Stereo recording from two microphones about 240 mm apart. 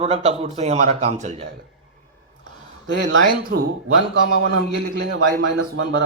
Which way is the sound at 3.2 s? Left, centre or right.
Right.